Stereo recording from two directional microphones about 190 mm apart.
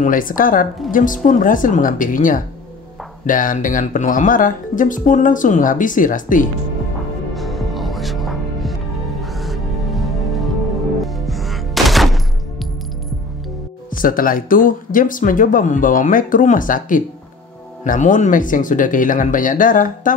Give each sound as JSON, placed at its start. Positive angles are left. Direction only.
{"t": 0.0, "sound": "speech", "side_deg": 45}
{"t": 7.3, "sound": "music", "side_deg": 0}
{"t": 13.9, "sound": "speech", "side_deg": 45}